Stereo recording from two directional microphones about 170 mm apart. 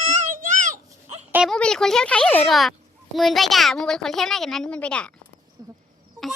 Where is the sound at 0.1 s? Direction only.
50° right (ahead or behind).